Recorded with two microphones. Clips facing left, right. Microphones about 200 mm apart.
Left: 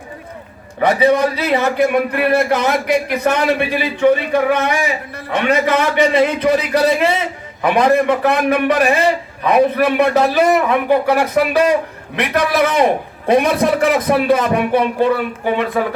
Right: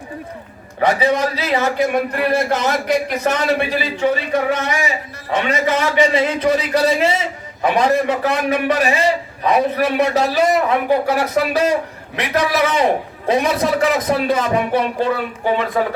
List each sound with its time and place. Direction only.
0.8 s a man's voice: 55° left (ahead or behind)